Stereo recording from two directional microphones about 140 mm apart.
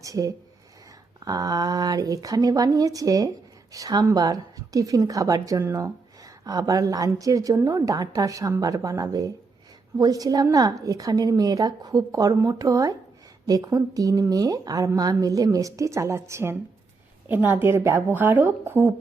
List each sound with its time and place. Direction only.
0.0 s a woman's voice: 25° right (ahead or behind)